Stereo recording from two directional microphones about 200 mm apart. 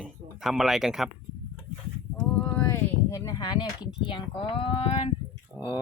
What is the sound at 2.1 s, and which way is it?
Speech, 5° left (ahead or behind).